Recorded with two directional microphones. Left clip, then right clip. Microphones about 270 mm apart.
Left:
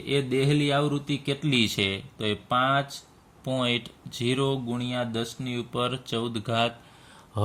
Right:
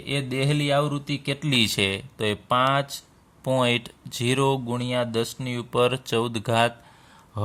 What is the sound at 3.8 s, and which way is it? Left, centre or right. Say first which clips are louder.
Speech: right 3 dB; right.